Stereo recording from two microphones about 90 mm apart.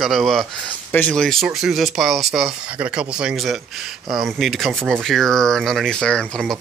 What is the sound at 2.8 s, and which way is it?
Speech, 15° right (ahead or behind).